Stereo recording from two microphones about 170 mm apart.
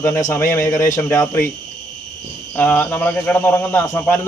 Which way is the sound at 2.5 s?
10° left (ahead or behind).